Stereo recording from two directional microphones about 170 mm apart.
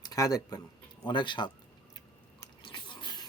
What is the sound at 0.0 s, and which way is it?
Speech, 20° left (ahead or behind).